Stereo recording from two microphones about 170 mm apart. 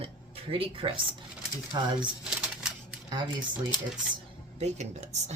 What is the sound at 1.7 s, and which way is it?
Speech, 20° right (ahead or behind).